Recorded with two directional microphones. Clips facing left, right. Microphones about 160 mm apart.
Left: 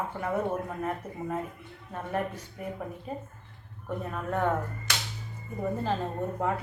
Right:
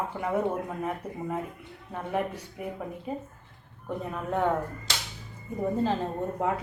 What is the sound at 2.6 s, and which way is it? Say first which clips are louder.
Speech: right 1 dB; 10° right (ahead or behind).